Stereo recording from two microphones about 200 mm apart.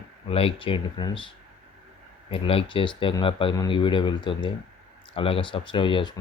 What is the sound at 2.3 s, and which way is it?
Speech, 25° left (ahead or behind).